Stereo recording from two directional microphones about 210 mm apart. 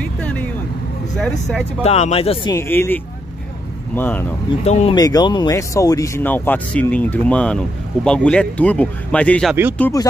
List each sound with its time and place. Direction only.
0.0 s vehicle: 5° left (ahead or behind)
1.1 s speech: 5° left (ahead or behind)
1.8 s speech: 30° left (ahead or behind)
2.5 s speech: 10° left (ahead or behind)
4.6 s speech: 30° left (ahead or behind)
4.9 s speech: 20° left (ahead or behind)